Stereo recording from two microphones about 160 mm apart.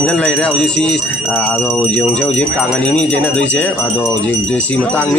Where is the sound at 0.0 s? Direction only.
5° left (ahead or behind).